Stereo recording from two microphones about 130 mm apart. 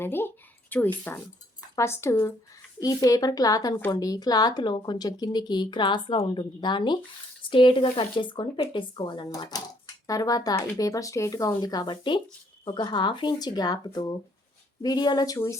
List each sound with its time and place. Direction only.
0.0 s a woman's voice: 15° left (ahead or behind)